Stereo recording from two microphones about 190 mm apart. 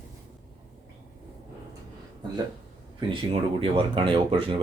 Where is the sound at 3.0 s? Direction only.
30° right (ahead or behind).